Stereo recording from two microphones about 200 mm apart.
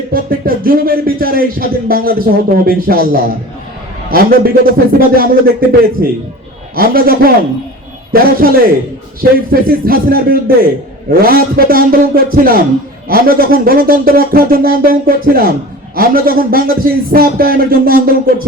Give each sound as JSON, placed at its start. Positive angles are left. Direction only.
{"t": 0.1, "sound": "music", "side_deg": -45}
{"t": 4.9, "sound": "music", "side_deg": -45}